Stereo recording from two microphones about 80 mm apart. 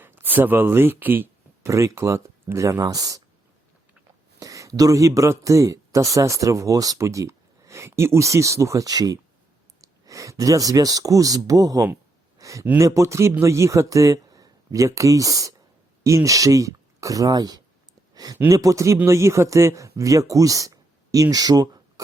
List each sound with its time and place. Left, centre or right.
0.0 s speech: right
1.6 s speech: right
4.4 s speech: right
12.4 s a sound: right
12.7 s speech: right
18.1 s a sound: right
18.4 s speech: right